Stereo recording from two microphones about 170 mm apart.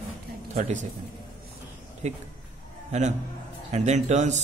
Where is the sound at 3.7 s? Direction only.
40° right (ahead or behind).